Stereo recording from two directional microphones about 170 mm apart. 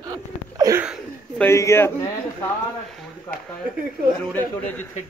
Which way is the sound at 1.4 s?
15° left (ahead or behind).